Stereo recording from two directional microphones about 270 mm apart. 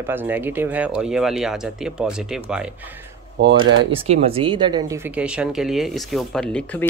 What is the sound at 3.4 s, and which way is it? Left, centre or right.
Speech, right.